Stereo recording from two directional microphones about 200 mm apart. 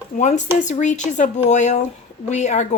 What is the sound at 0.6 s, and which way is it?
Speech, 35° left (ahead or behind).